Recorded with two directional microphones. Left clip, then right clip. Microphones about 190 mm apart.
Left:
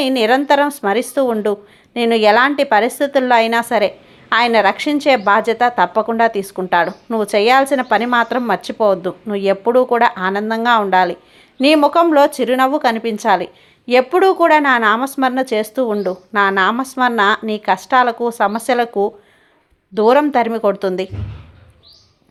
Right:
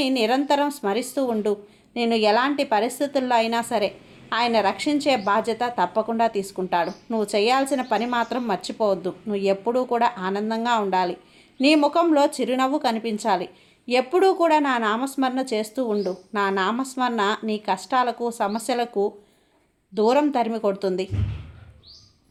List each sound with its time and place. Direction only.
0.0 s a woman's voice: 20° left (ahead or behind)